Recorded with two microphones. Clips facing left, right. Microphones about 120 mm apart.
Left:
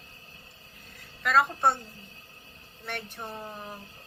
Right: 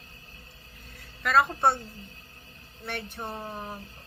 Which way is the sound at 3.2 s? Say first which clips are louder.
Right 3 dB; 20° right (ahead or behind).